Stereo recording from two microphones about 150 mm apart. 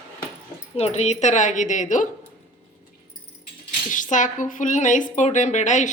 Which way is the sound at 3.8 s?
60° left (ahead or behind).